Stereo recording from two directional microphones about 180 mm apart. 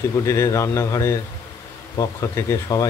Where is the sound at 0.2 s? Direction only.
15° left (ahead or behind).